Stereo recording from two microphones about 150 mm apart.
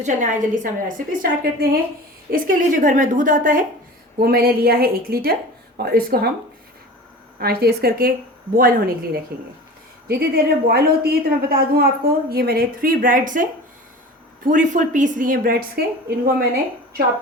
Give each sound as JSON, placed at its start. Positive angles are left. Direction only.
{"t": 0.0, "sound": "a woman's voice", "side_deg": -55}
{"t": 4.2, "sound": "a woman's voice", "side_deg": -90}
{"t": 7.3, "sound": "speech", "side_deg": -90}
{"t": 10.1, "sound": "a woman's voice", "side_deg": -90}